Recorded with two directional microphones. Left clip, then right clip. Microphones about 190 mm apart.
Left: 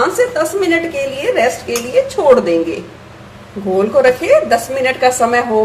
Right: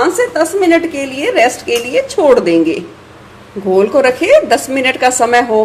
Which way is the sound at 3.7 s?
45° right (ahead or behind).